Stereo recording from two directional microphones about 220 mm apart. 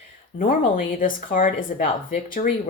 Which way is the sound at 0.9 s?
40° left (ahead or behind).